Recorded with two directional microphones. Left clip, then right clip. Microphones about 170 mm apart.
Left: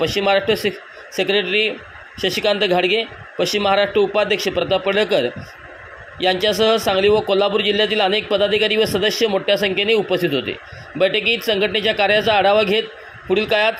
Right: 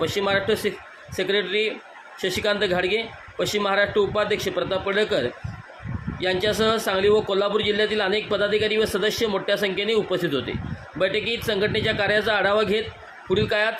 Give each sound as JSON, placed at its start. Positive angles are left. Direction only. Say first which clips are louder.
{"t": 0.0, "sound": "a man's voice", "louder": "left 6 dB", "side_deg": 20}